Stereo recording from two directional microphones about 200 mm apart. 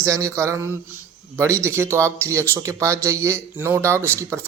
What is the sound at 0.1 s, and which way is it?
Speech, 15° right (ahead or behind).